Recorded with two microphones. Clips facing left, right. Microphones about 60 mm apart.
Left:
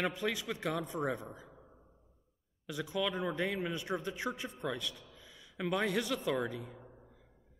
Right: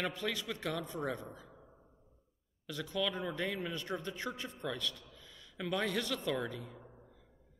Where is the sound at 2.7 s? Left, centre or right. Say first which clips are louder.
Left 1 dB; centre.